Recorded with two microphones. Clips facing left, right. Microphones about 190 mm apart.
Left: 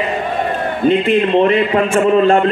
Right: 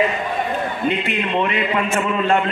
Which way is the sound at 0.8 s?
35° left (ahead or behind).